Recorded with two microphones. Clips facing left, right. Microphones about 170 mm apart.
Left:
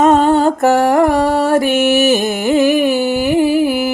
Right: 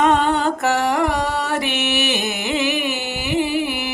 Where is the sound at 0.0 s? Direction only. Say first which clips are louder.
Left 7 dB; 45° left (ahead or behind).